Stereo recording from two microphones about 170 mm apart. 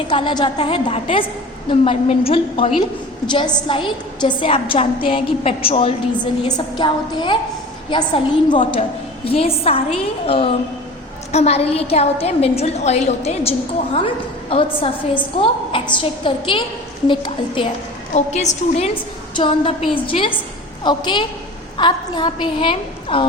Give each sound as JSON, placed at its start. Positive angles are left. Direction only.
{"t": 0.1, "sound": "a woman's voice", "side_deg": 30}
{"t": 18.1, "sound": "a woman's voice", "side_deg": 45}
{"t": 19.4, "sound": "a woman's voice", "side_deg": 30}